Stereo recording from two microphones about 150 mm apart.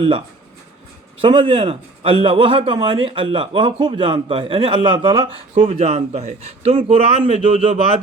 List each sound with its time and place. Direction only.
1.2 s a man's voice: 35° right (ahead or behind)